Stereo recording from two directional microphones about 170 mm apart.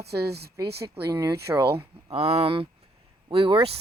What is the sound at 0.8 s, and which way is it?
Speech, 20° right (ahead or behind).